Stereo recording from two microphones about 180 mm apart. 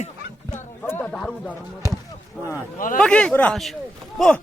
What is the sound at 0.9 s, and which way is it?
Speech, 10° left (ahead or behind).